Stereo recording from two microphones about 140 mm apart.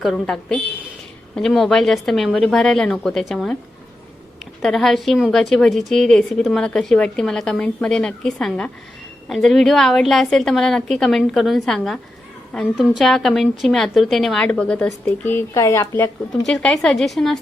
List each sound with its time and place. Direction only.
0.0 s speech: centre (ahead or behind)
4.6 s speech: centre (ahead or behind); by 16.0 s 20° left (ahead or behind)
16.5 s speech: 5° left (ahead or behind)